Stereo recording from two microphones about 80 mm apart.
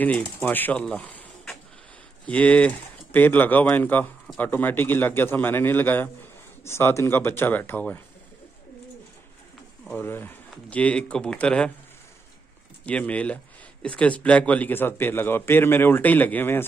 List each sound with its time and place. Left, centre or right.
0.0 s a man's voice: centre
2.2 s a man's voice: centre
9.9 s a man's voice: left
10.7 s speech: centre
12.8 s a man's voice: centre